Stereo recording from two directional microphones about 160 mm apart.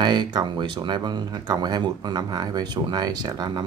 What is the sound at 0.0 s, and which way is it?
Speech, 30° right (ahead or behind).